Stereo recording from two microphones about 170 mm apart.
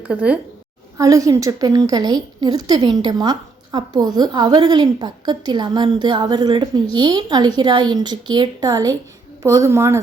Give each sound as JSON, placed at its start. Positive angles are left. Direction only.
{"t": 0.1, "sound": "a woman's voice", "side_deg": -5}
{"t": 0.9, "sound": "a woman's voice", "side_deg": -20}